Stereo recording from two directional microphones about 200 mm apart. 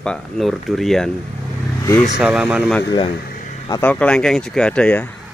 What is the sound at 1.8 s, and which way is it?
Speech, 15° left (ahead or behind).